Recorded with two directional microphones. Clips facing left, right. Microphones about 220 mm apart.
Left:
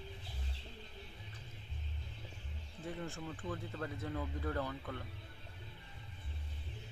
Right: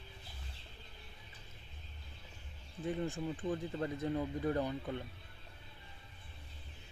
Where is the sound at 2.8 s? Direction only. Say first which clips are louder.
Right 6 dB; 20° right (ahead or behind).